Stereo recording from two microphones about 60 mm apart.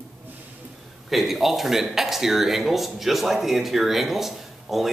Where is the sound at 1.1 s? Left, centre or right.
Centre.